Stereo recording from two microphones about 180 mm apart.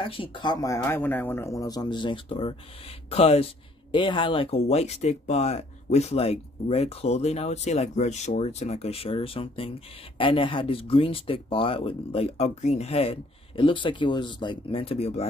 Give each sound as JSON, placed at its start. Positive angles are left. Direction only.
{"t": 0.0, "sound": "speech", "side_deg": 30}